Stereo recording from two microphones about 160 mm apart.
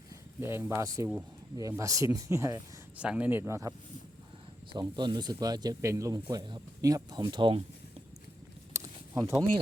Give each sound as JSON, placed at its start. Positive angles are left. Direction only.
{"t": 0.3, "sound": "speech", "side_deg": -15}
{"t": 3.0, "sound": "speech", "side_deg": -10}
{"t": 8.7, "sound": "a sound", "side_deg": -20}